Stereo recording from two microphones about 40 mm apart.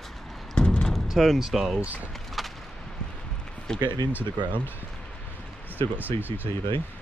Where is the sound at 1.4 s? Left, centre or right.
Centre.